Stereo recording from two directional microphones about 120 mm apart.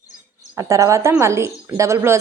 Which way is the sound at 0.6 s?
25° right (ahead or behind).